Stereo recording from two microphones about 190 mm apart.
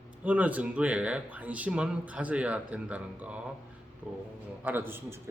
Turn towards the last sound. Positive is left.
turn(degrees=-10)  # may be behind; listen again after turning